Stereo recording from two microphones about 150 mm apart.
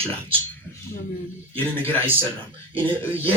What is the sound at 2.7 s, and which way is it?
Speech, 35° right (ahead or behind).